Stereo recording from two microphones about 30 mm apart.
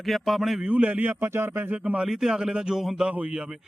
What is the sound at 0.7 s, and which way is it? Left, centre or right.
Speech, right.